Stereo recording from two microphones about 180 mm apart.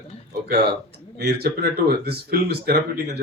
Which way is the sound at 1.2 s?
60° right (ahead or behind).